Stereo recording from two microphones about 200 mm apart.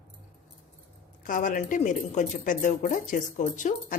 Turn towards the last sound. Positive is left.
turn(degrees=40)  # may be behind; listen again after turning